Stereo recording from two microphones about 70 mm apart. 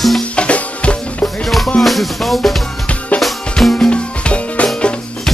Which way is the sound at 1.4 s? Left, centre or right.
Centre.